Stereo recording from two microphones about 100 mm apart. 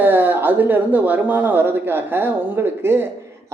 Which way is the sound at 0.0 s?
20° right (ahead or behind).